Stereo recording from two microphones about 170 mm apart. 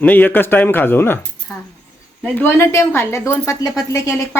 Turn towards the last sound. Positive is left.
turn(degrees=20)  # may be behind; listen again after turning